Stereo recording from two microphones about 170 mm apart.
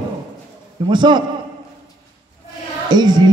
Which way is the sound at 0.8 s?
25° right (ahead or behind).